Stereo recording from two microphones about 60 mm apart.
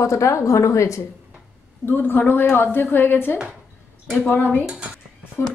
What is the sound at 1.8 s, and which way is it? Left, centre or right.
A woman's voice, left.